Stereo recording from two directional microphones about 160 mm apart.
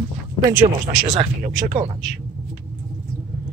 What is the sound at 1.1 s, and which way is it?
Speech, 45° right (ahead or behind).